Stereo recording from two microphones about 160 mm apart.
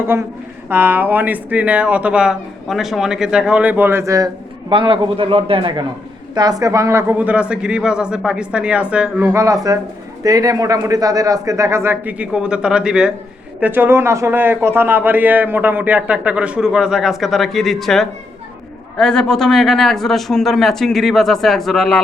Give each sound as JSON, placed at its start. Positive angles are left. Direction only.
{"t": 0.0, "sound": "a man's voice", "side_deg": -15}
{"t": 4.7, "sound": "a man's voice", "side_deg": -35}
{"t": 9.3, "sound": "a man's voice", "side_deg": -20}